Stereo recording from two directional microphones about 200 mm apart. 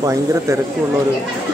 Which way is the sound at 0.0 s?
15° right (ahead or behind).